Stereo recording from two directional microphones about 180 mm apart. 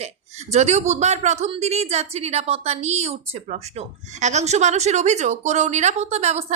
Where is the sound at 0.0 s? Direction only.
40° right (ahead or behind).